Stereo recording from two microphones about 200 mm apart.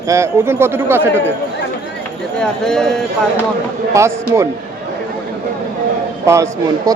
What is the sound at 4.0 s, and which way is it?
Speech, 15° right (ahead or behind).